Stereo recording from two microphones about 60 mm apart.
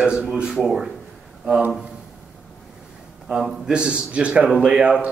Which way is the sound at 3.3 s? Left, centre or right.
Centre.